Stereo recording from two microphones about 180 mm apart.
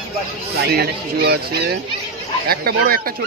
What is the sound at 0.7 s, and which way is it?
Speech, 60° right (ahead or behind).